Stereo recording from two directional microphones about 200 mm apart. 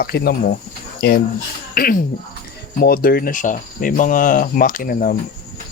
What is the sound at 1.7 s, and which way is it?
Speech, 45° left (ahead or behind).